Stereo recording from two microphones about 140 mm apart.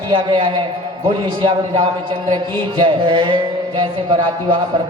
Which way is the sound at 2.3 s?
30° right (ahead or behind).